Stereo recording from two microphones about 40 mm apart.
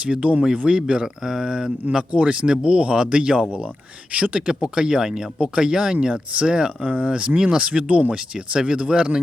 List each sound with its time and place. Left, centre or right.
0.0 s speech: right
0.6 s speech: centre; by 4.4 s right
4.4 s speech: right
6.8 s speech: right
7.1 s speech: right
8.1 s speech: right